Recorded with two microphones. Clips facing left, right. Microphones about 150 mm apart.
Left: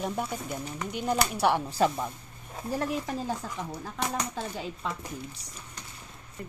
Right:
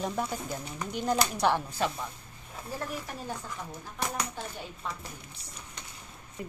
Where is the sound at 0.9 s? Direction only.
5° left (ahead or behind).